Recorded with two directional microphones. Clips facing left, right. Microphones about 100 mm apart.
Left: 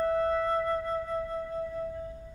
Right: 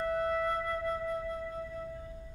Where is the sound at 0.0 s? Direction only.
35° left (ahead or behind).